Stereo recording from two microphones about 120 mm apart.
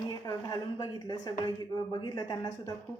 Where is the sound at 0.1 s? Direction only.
30° left (ahead or behind).